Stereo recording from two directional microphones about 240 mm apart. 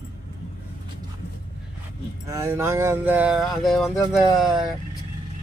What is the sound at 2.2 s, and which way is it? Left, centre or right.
Speech, centre.